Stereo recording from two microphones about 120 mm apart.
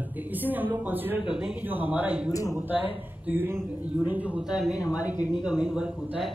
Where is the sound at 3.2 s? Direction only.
15° right (ahead or behind).